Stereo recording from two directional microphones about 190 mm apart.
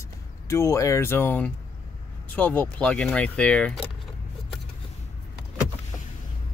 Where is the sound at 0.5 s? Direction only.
15° left (ahead or behind).